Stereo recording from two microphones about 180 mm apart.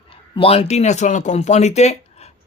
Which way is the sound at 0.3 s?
30° left (ahead or behind).